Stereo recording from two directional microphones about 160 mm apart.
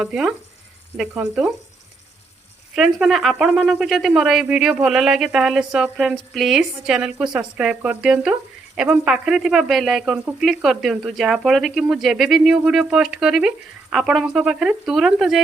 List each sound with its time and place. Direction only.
0.0 s speech: 5° right (ahead or behind)
2.7 s speech: centre (ahead or behind)